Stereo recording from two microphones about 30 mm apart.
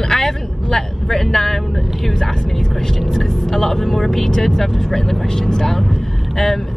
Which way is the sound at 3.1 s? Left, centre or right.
Centre.